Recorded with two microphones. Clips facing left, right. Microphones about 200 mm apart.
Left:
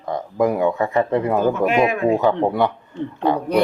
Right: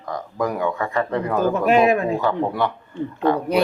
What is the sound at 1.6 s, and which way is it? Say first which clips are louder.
Speech: right 5 dB; 40° right (ahead or behind).